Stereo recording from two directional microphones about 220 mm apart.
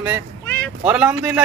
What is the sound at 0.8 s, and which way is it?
Speech, 5° right (ahead or behind).